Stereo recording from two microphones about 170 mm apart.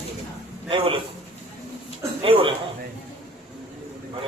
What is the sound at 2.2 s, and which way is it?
Speech, 30° right (ahead or behind).